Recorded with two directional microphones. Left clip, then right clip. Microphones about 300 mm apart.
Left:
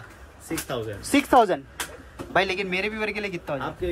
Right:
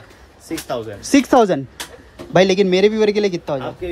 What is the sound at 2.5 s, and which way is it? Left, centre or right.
Speech, right.